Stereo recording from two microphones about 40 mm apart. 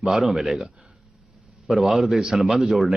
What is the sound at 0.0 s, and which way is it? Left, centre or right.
Speech, centre.